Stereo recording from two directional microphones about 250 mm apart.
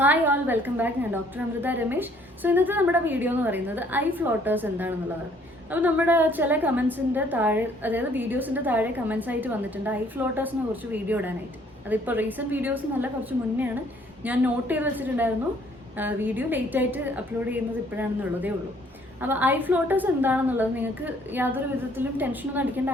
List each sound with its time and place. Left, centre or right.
0.0 s a woman's voice: centre
14.3 s a woman's voice: centre